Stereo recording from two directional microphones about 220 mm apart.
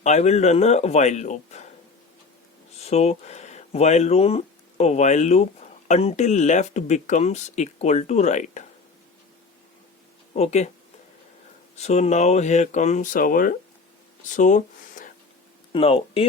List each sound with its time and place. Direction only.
0.0 s speech: 30° left (ahead or behind)
2.7 s speech: 30° left (ahead or behind)
10.3 s speech: 30° left (ahead or behind)
11.8 s speech: 30° left (ahead or behind)
15.7 s speech: 25° left (ahead or behind)